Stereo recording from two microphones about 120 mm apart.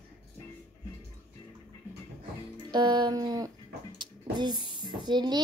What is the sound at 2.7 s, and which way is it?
A child's voice, 35° right (ahead or behind).